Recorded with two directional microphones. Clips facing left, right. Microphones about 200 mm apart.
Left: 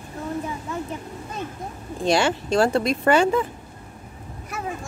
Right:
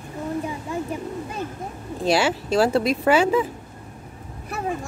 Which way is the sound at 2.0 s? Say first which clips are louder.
Even; 5° right (ahead or behind).